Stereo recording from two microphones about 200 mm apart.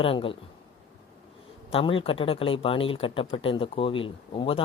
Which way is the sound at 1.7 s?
25° left (ahead or behind).